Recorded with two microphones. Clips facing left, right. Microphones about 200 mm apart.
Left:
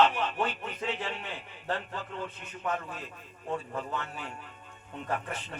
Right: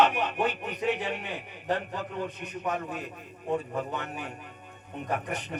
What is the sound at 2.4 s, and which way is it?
Speech, 15° right (ahead or behind).